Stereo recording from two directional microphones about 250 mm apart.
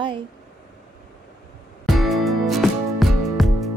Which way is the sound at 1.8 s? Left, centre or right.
Centre.